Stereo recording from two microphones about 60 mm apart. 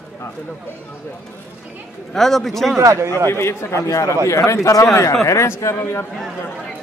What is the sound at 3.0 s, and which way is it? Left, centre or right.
A man's voice, left.